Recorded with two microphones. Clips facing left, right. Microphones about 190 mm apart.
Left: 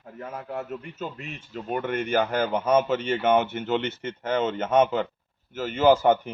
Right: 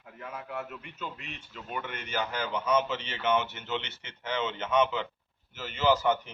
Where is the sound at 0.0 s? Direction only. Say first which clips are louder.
Left 5 dB; 40° left (ahead or behind).